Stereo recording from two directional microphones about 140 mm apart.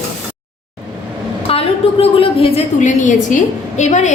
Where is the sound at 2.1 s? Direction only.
40° left (ahead or behind).